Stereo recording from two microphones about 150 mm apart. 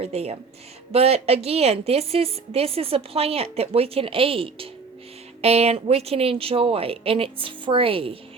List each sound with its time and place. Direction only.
0.0 s a woman's voice: 45° right (ahead or behind)